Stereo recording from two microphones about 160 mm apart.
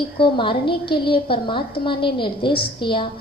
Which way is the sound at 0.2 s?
30° left (ahead or behind).